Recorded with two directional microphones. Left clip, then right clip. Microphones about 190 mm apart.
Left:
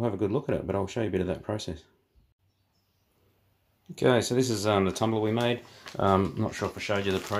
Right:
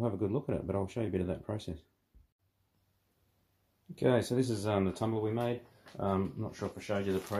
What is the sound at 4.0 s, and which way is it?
Speech, 10° left (ahead or behind).